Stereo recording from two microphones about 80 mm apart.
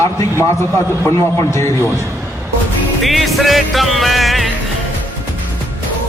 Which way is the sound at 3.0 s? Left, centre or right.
Centre.